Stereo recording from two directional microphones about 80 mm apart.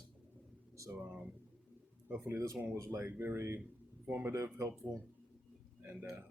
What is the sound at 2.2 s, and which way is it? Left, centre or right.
Speech, right.